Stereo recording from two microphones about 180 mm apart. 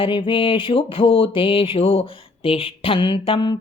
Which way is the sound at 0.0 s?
30° left (ahead or behind).